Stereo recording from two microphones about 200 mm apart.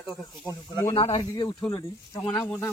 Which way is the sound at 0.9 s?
20° left (ahead or behind).